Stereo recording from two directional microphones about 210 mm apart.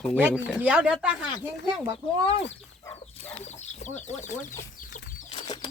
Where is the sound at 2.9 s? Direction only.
30° left (ahead or behind).